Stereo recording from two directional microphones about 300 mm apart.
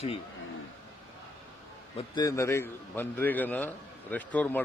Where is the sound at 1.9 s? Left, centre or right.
Centre.